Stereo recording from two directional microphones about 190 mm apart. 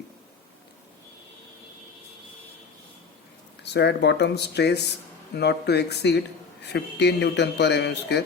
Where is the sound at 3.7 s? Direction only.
60° left (ahead or behind).